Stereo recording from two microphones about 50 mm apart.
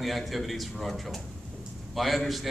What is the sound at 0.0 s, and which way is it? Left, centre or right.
A man's voice, centre.